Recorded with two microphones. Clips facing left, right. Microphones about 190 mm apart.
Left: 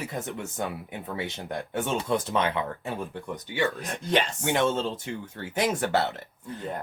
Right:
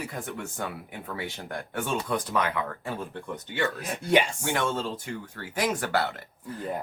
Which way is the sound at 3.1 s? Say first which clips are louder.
Left 1 dB; 15° left (ahead or behind).